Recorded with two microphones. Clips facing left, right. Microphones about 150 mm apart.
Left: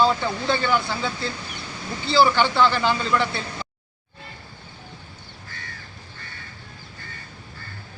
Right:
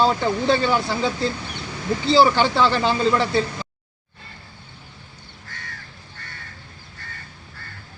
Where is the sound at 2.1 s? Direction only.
35° right (ahead or behind).